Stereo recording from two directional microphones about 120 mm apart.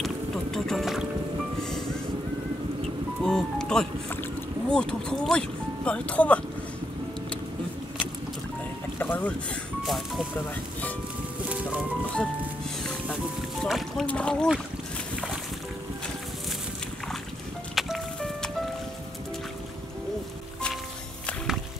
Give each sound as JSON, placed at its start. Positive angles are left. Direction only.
{"t": 0.0, "sound": "music", "side_deg": 0}
{"t": 3.2, "sound": "music", "side_deg": 5}
{"t": 4.1, "sound": "speech", "side_deg": 10}
{"t": 8.9, "sound": "boat", "side_deg": 15}
{"t": 9.8, "sound": "speech", "side_deg": 0}
{"t": 12.8, "sound": "music", "side_deg": 0}
{"t": 14.0, "sound": "speech", "side_deg": 10}
{"t": 17.7, "sound": "music", "side_deg": 0}